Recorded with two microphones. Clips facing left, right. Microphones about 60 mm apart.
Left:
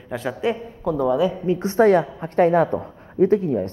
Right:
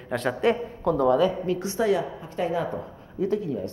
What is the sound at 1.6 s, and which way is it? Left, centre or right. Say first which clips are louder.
A woman's voice: left 10 dB; left.